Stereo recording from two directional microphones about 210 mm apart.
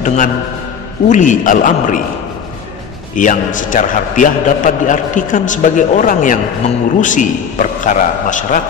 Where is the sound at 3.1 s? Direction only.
40° left (ahead or behind).